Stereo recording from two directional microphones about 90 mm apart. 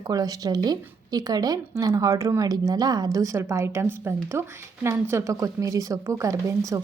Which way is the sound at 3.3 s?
30° right (ahead or behind).